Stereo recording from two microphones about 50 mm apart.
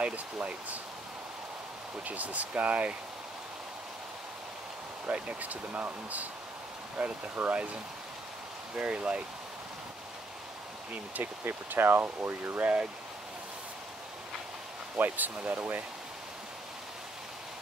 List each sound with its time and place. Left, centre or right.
0.0 s speech: right
2.0 s speech: right
5.1 s speech: right
8.7 s speech: right
11.4 s speech: right
15.0 s speech: right